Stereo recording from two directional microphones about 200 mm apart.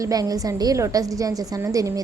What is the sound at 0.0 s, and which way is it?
A woman's voice, 20° right (ahead or behind).